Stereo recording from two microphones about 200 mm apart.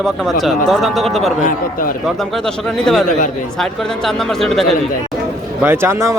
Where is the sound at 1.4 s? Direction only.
45° left (ahead or behind).